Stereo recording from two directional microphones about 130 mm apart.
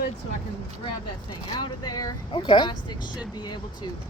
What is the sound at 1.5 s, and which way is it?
Speech, 30° left (ahead or behind).